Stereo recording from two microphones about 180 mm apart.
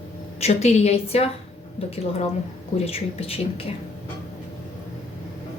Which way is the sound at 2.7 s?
35° left (ahead or behind).